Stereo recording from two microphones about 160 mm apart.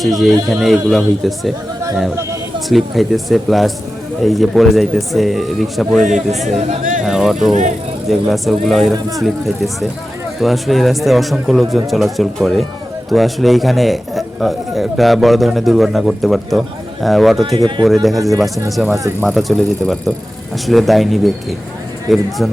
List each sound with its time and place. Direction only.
0.0 s speech: centre (ahead or behind)
2.6 s speech: centre (ahead or behind)
6.6 s speech: 50° right (ahead or behind)
7.0 s speech: centre (ahead or behind)
10.4 s speech: centre (ahead or behind)